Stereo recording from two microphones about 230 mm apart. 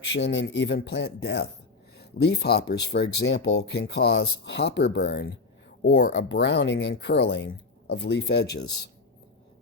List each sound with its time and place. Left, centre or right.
0.1 s speech: left